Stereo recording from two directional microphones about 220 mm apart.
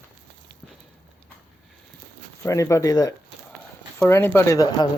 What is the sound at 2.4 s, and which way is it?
Speech, 15° left (ahead or behind).